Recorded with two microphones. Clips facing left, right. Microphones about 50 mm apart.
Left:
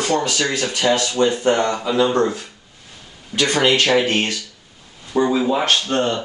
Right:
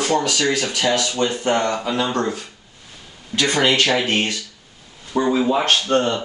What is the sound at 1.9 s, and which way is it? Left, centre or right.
Speech, centre.